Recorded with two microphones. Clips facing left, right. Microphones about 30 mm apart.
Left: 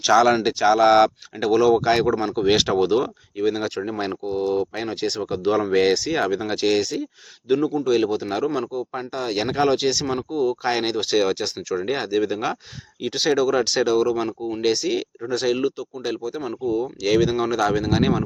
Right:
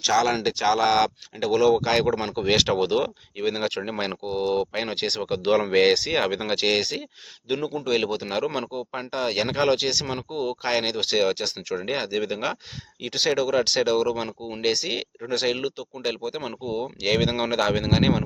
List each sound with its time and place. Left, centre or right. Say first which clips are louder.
0.0 s speech: left 5 dB; centre
0.3 s speech: left 4 dB; centre
2.6 s speech: left 3 dB; centre
6.7 s speech: left 3 dB; right
7.9 s speech: left 1 dB; right
8.4 s speech: left 4 dB; right
8.9 s speech: left 1 dB; right
10.2 s speech: left 6 dB; right
10.6 s speech: left 2 dB; centre; by 15.0 s right
15.3 s speech: left 2 dB; right
15.5 s speech: left 5 dB; right
16.2 s speech: left 4 dB; right
17.9 s speech: right 2 dB; right